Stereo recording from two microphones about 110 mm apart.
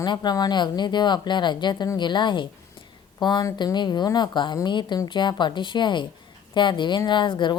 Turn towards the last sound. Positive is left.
turn(degrees=45)  # may be behind; listen again after turning